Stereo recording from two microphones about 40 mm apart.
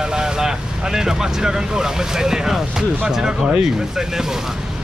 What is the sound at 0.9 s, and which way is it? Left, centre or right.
Speech, centre.